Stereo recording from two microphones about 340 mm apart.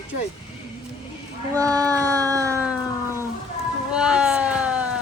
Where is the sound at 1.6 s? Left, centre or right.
Centre.